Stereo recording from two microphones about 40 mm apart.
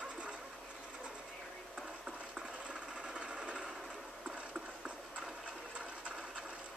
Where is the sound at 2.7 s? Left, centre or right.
Right.